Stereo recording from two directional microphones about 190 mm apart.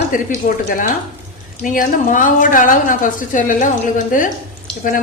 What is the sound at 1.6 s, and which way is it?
A woman's voice, 45° left (ahead or behind).